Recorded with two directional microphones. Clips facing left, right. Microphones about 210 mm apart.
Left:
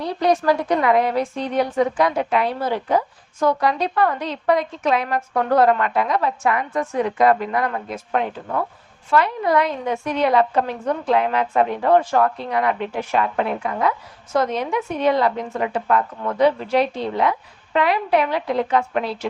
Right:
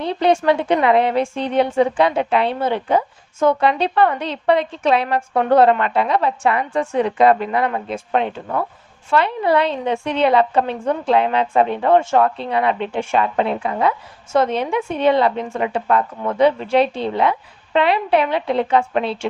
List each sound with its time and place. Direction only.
0.0 s a woman's voice: 25° right (ahead or behind)